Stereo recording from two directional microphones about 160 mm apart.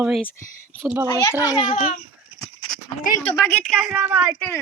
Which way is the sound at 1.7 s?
45° left (ahead or behind).